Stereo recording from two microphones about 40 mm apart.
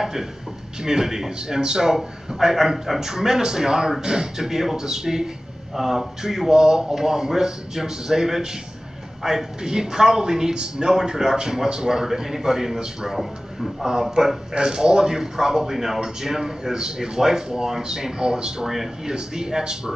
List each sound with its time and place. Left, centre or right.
0.0 s a man's voice: centre
14.1 s a man's voice: centre
18.7 s a man's voice: centre
19.1 s a man's voice: centre